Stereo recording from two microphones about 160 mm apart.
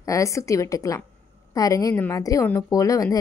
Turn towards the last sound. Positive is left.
turn(degrees=20)  # may be behind; listen again after turning